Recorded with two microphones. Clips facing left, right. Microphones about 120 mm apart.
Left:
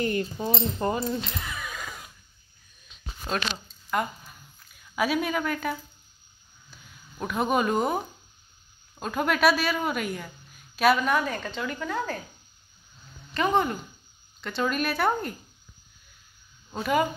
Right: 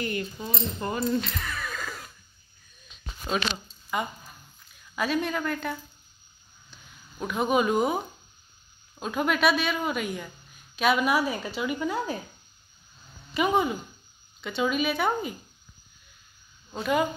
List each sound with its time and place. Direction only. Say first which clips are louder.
0.0 s speech: left 4 dB; 35° left (ahead or behind)
0.9 s a sound: right 2 dB; 20° left (ahead or behind)
3.3 s a woman's voice: right 1 dB; centre (ahead or behind)
6.7 s a sound: left 1 dB; centre (ahead or behind)
9.0 s a woman's voice: left 1 dB; centre (ahead or behind)
11.0 s a woman's voice: right 1 dB; 10° right (ahead or behind)
13.3 s a woman's voice: even; 5° right (ahead or behind)
16.7 s speech: left 1 dB; centre (ahead or behind)